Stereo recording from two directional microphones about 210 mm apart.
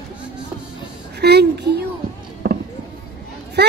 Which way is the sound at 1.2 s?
50° right (ahead or behind).